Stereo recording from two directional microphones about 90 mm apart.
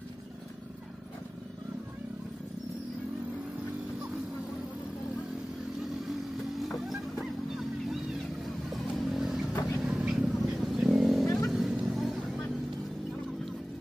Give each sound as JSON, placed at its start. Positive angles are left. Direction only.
{"t": 6.7, "sound": "music", "side_deg": 0}
{"t": 9.1, "sound": "vehicle", "side_deg": -5}
{"t": 11.2, "sound": "vehicle", "side_deg": 35}
{"t": 11.5, "sound": "vehicle", "side_deg": -5}